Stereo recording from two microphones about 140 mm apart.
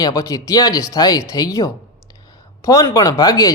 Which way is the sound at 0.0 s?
25° left (ahead or behind).